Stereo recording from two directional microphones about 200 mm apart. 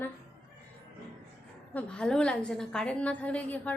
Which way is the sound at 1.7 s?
5° left (ahead or behind).